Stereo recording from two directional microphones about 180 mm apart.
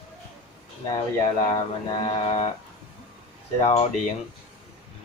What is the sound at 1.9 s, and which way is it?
Speech, 30° left (ahead or behind).